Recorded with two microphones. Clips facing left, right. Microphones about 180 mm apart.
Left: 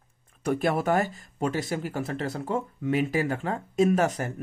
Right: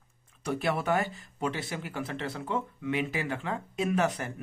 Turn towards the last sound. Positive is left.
turn(degrees=45)  # may be behind; listen again after turning